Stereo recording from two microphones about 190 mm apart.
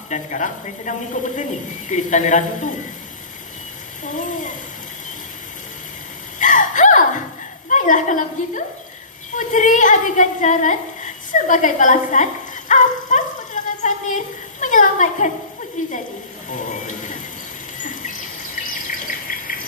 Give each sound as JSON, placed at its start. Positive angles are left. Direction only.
{"t": 0.1, "sound": "speech", "side_deg": 40}
{"t": 4.0, "sound": "speech", "side_deg": 40}
{"t": 6.4, "sound": "a sound", "side_deg": 40}
{"t": 7.7, "sound": "a woman's voice", "side_deg": 40}
{"t": 13.8, "sound": "a sound", "side_deg": 40}
{"t": 15.8, "sound": "speech", "side_deg": 40}
{"t": 17.7, "sound": "cricket", "side_deg": 40}
{"t": 18.6, "sound": "bird", "side_deg": 45}